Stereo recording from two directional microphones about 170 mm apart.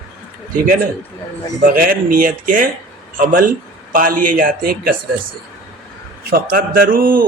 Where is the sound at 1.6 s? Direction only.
55° right (ahead or behind).